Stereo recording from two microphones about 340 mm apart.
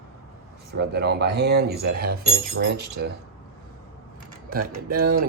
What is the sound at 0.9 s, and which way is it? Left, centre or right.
Speech, right.